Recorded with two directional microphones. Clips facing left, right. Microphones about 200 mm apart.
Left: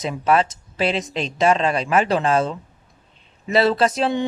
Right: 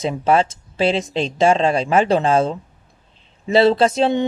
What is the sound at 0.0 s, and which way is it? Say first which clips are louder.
Speech: right 2 dB; 30° right (ahead or behind).